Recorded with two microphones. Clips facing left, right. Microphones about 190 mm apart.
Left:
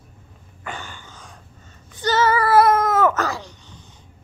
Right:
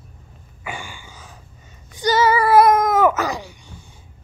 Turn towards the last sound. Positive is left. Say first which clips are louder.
# right 2 dB
turn(degrees=-10)  # may be behind; listen again after turning